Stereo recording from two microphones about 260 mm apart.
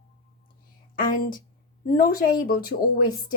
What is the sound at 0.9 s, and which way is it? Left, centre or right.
A woman's voice, left.